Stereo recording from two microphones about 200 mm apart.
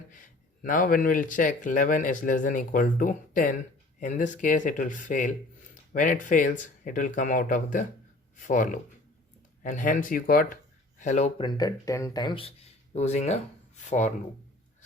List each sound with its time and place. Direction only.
0.1 s speech: 40° left (ahead or behind)
11.4 s speech: 20° left (ahead or behind); by 13.4 s 35° left (ahead or behind)